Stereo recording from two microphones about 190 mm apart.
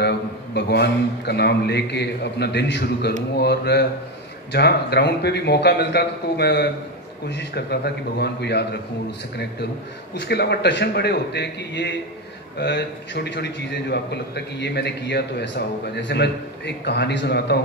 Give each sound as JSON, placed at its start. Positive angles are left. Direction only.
{"t": 0.6, "sound": "a man's voice", "side_deg": 60}
{"t": 10.1, "sound": "a man's voice", "side_deg": 60}